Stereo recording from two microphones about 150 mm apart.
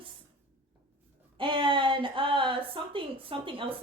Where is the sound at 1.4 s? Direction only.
35° right (ahead or behind).